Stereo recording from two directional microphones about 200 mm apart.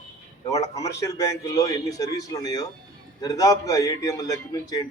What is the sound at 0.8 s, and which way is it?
A man's voice, 15° left (ahead or behind).